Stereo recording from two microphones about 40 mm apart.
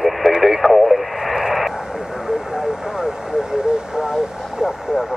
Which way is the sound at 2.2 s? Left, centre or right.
Centre.